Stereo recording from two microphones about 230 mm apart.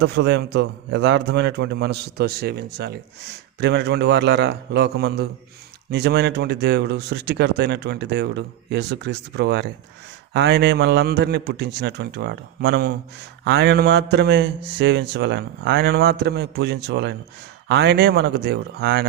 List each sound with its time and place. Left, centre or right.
0.0 s a man's voice: right